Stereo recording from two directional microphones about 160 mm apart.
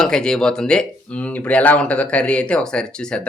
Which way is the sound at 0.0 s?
5° left (ahead or behind).